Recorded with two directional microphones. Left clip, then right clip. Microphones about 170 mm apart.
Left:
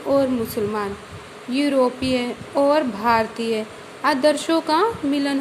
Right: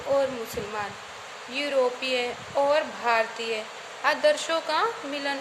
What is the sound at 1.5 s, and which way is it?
Speech, 25° left (ahead or behind).